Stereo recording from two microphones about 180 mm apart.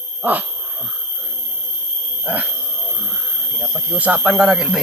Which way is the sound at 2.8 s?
Centre (ahead or behind).